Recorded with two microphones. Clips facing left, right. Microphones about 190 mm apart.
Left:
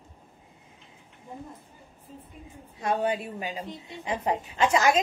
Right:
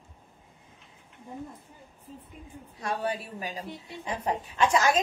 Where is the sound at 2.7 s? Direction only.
25° left (ahead or behind).